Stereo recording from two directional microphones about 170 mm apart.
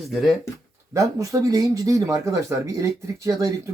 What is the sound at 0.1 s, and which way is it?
Speech, centre (ahead or behind).